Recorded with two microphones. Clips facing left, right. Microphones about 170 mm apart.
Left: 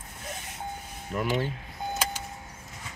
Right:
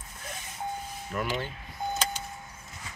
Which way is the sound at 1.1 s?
30° left (ahead or behind).